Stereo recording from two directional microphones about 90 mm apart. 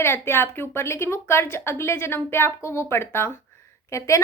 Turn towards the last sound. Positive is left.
turn(degrees=35)  # may be behind; listen again after turning